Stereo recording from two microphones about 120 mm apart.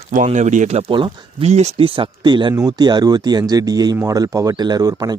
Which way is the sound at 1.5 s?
65° right (ahead or behind).